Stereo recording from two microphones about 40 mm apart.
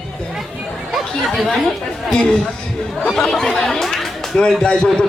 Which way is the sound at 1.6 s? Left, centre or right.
Centre.